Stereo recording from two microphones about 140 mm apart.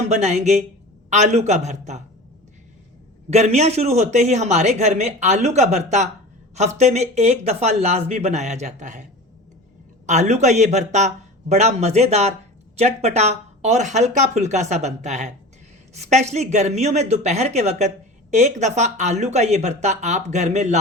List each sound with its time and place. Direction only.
0.1 s speech: 55° right (ahead or behind)
3.2 s speech: 50° right (ahead or behind)
10.1 s speech: 55° right (ahead or behind)